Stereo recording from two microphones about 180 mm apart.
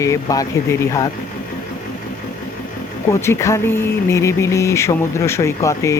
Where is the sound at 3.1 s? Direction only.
15° left (ahead or behind).